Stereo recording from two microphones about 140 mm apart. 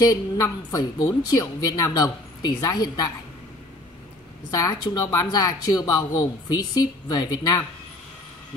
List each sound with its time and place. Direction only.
0.0 s speech: 25° left (ahead or behind)
4.5 s speech: 25° left (ahead or behind)